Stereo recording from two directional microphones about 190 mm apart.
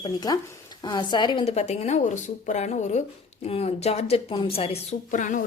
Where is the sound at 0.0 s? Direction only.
20° left (ahead or behind).